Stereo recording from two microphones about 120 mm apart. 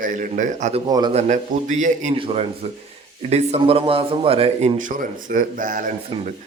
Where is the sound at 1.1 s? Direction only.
75° right (ahead or behind).